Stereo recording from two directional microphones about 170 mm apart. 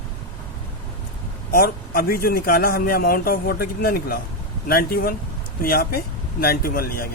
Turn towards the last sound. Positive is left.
turn(degrees=60)  # may be behind; listen again after turning